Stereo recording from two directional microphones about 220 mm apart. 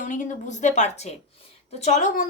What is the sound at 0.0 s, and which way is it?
A woman's voice, 35° left (ahead or behind).